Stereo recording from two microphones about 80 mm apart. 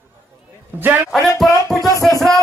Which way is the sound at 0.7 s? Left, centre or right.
Right.